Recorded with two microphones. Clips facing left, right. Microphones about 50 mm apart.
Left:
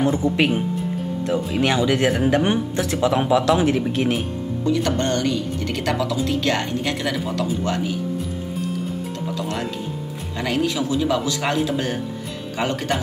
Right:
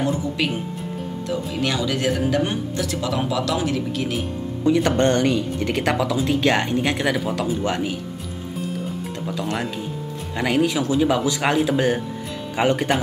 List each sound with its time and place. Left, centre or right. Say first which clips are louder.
0.0 s speech: left 4 dB; left
1.6 s speech: left 4 dB; left
4.6 s speech: right 4 dB; right
9.4 s a man's voice: right 2 dB; centre